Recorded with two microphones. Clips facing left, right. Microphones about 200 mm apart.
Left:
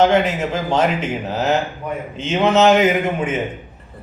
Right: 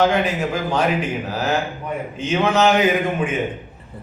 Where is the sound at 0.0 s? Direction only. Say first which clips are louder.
Left 3 dB; 25° left (ahead or behind).